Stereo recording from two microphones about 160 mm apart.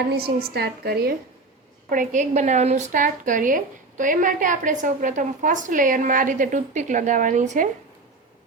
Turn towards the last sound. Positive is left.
turn(degrees=-50)  # may be behind; listen again after turning